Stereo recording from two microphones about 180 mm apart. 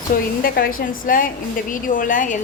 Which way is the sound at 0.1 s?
50° left (ahead or behind).